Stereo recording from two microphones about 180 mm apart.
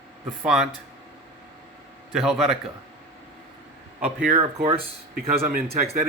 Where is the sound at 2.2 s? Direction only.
Centre (ahead or behind).